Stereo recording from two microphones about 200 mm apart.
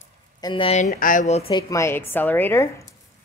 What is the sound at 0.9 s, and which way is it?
Speech, 45° left (ahead or behind).